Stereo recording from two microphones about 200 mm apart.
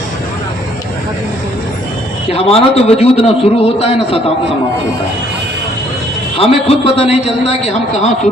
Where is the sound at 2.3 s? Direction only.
30° left (ahead or behind).